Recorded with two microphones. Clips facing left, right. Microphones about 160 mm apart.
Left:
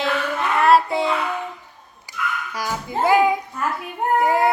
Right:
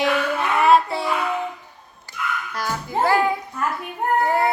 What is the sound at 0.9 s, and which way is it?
Child singing, 20° left (ahead or behind).